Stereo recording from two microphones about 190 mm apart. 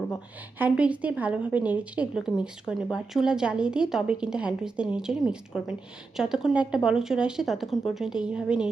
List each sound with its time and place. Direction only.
0.6 s a woman's voice: 5° right (ahead or behind)